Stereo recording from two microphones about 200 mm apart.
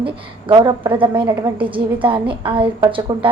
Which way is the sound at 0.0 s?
25° right (ahead or behind).